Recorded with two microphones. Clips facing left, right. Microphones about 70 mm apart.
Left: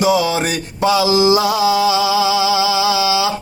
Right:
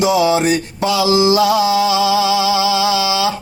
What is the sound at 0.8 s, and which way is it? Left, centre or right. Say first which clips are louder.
Music: left 3 dB; left.